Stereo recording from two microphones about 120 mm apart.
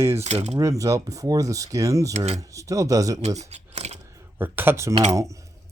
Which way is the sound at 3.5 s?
65° right (ahead or behind).